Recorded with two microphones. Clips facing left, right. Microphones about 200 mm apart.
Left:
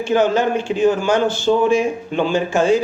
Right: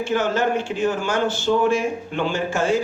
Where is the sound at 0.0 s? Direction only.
15° left (ahead or behind).